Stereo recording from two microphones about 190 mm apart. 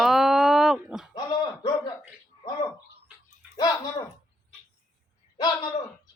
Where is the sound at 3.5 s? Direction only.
20° left (ahead or behind).